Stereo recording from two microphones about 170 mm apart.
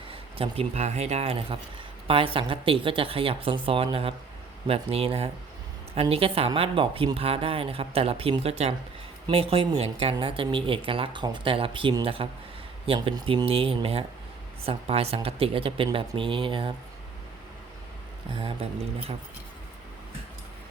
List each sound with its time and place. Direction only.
0.1 s speech: 35° right (ahead or behind)
18.3 s speech: 35° right (ahead or behind)